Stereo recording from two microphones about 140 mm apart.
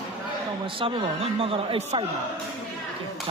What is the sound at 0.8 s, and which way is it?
A man's voice, 40° right (ahead or behind).